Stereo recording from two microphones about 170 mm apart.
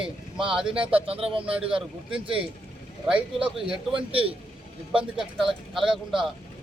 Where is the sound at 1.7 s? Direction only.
30° right (ahead or behind).